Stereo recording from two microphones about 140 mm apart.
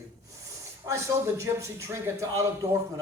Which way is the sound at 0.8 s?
20° right (ahead or behind).